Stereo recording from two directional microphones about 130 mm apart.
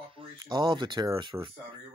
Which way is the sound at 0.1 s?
40° right (ahead or behind).